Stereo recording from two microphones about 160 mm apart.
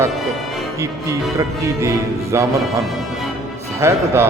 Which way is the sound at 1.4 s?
20° right (ahead or behind).